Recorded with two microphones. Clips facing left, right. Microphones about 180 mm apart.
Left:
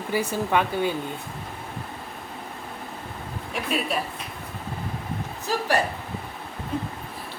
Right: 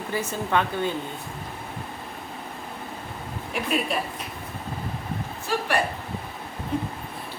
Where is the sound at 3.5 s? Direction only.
Centre (ahead or behind).